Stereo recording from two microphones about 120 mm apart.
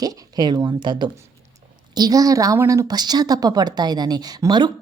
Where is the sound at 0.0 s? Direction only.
35° right (ahead or behind).